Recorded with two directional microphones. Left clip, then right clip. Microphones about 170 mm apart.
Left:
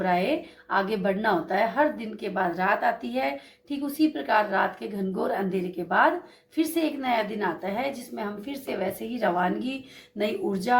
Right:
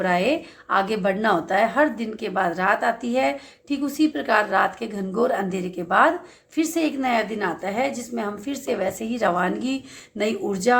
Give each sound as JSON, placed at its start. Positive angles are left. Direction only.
{"t": 0.0, "sound": "a woman's voice", "side_deg": -40}